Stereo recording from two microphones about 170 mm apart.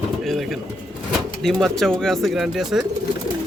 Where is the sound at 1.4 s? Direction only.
Centre (ahead or behind).